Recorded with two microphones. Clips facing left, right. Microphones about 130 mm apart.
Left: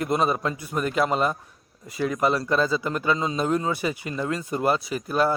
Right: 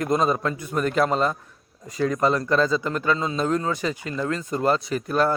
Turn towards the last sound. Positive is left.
turn(degrees=5)  # may be behind; listen again after turning